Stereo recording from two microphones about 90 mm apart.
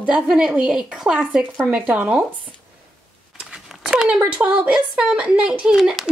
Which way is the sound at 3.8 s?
10° right (ahead or behind).